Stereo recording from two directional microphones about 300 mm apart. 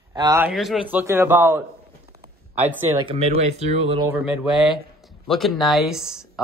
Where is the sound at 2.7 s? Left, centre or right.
Centre.